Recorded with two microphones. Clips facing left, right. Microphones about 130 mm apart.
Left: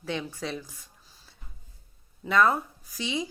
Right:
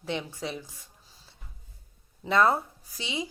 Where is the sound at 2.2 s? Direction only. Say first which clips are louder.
Even; 30° right (ahead or behind).